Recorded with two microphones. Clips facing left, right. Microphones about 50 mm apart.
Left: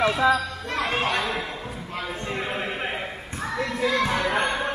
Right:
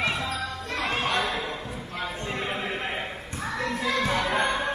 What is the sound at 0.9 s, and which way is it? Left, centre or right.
Speech, left.